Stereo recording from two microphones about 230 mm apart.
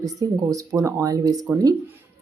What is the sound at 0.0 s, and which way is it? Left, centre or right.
Speech, centre.